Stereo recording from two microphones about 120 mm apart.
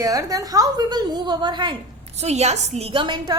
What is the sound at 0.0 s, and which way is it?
A woman's voice, 30° right (ahead or behind).